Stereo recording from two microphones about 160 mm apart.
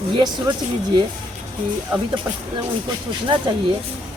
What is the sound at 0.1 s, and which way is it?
Speech, 30° right (ahead or behind).